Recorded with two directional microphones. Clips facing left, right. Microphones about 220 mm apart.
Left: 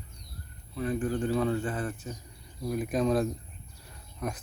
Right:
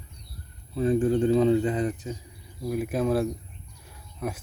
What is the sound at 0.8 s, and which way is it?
Speech, 30° right (ahead or behind).